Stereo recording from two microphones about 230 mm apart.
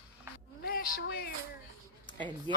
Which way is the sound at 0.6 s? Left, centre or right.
Left.